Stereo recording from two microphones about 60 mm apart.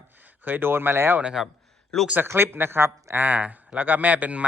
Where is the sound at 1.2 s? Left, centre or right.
Centre.